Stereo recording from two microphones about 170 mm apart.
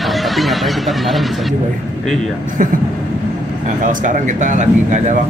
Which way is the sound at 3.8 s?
50° right (ahead or behind).